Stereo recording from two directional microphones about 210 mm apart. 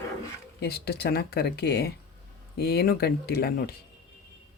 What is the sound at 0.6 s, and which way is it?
Speech, 50° left (ahead or behind).